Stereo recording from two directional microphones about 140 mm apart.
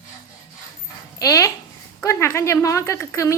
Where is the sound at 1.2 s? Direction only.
25° left (ahead or behind).